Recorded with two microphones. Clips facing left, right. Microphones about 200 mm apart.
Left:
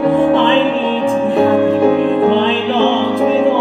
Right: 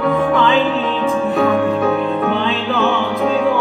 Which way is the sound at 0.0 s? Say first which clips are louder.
Left 4 dB; 30° left (ahead or behind).